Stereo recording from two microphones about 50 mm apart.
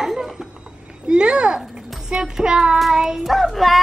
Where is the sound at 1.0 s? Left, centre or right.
Centre.